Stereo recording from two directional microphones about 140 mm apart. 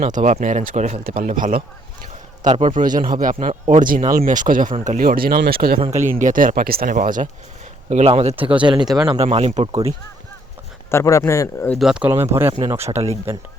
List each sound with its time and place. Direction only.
0.0 s speech: 60° right (ahead or behind)
2.4 s speech: 55° right (ahead or behind); by 3.3 s 75° right (ahead or behind)
3.4 s speech: 60° right (ahead or behind); by 5.8 s 90° right
5.8 s speech: 55° right (ahead or behind)
6.1 s speech: 70° right (ahead or behind)
7.9 s speech: 50° right (ahead or behind)
10.9 s speech: 20° left (ahead or behind)
11.8 s speech: 5° right (ahead or behind)
12.1 s speech: 20° right (ahead or behind)
12.8 s speech: 50° right (ahead or behind)